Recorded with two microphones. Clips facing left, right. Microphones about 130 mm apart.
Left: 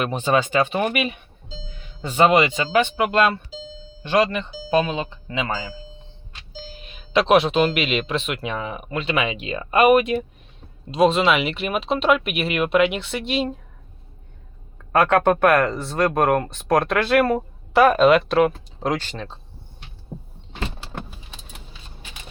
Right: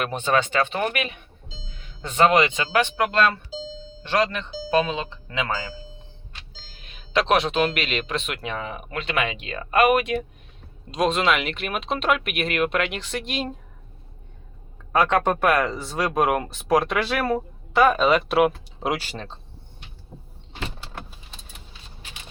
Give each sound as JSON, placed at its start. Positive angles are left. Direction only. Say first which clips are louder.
{"t": 0.0, "sound": "speech", "louder": "left 2 dB", "side_deg": 5}
{"t": 5.5, "sound": "speech", "louder": "left 1 dB", "side_deg": 15}
{"t": 6.7, "sound": "speech", "louder": "left 8 dB", "side_deg": 5}
{"t": 14.9, "sound": "speech", "louder": "left 3 dB", "side_deg": 5}